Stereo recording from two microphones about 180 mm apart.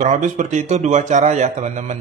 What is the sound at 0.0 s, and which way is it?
Speech, 45° right (ahead or behind).